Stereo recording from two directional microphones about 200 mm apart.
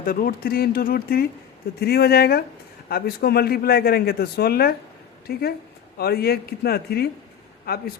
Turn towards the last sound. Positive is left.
turn(degrees=50)  # may be behind; listen again after turning